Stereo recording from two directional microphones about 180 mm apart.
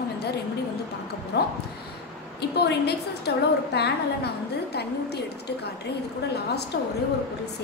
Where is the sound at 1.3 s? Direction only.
65° left (ahead or behind).